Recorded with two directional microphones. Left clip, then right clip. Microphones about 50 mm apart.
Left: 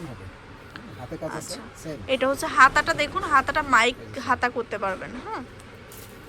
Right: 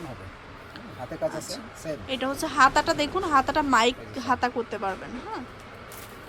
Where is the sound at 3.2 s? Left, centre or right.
Right.